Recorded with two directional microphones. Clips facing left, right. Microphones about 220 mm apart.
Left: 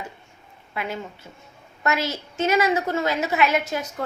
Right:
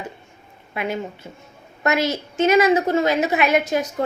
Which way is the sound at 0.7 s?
20° right (ahead or behind).